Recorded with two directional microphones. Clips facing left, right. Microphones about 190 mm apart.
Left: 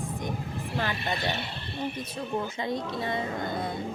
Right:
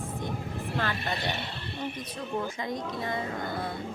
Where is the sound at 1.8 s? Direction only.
30° left (ahead or behind).